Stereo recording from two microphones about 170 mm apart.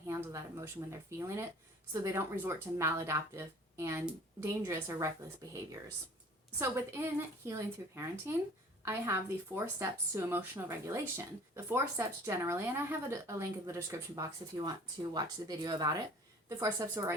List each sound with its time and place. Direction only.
0.1 s speech: 20° right (ahead or behind)